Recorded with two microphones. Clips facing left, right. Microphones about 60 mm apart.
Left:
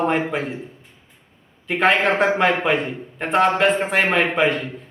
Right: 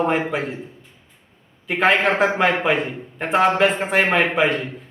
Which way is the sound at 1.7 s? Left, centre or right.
Centre.